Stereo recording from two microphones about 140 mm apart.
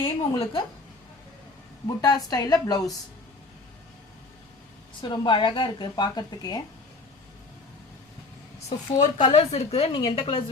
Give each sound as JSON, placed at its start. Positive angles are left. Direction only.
{"t": 0.0, "sound": "a woman's voice", "side_deg": 40}
{"t": 2.0, "sound": "a woman's voice", "side_deg": 25}
{"t": 5.0, "sound": "a woman's voice", "side_deg": 35}
{"t": 9.0, "sound": "a woman's voice", "side_deg": 30}
{"t": 9.5, "sound": "a woman's voice", "side_deg": 45}
{"t": 9.9, "sound": "a woman's voice", "side_deg": 35}